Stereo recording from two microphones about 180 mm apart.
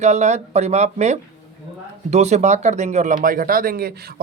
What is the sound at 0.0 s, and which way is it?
Speech, 40° right (ahead or behind).